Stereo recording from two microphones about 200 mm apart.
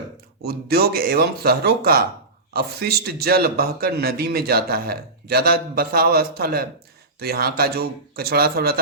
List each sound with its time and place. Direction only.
0.4 s a man's voice: 50° right (ahead or behind)